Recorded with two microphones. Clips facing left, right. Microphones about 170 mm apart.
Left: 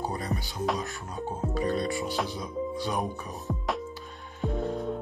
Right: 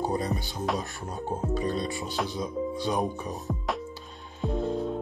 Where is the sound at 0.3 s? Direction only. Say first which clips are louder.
Even; centre (ahead or behind).